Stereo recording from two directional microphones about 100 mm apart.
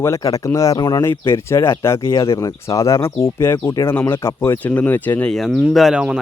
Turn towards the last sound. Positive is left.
turn(degrees=-10)  # may be behind; listen again after turning